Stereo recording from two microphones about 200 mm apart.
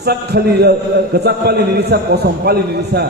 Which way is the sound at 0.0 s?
55° right (ahead or behind).